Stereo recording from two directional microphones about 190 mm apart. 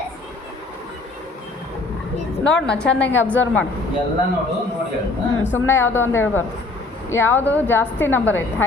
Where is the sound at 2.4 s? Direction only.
5° left (ahead or behind).